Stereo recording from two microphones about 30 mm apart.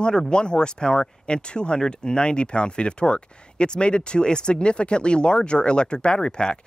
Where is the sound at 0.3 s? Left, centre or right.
Left.